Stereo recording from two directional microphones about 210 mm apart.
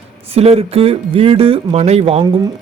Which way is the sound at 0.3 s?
30° right (ahead or behind).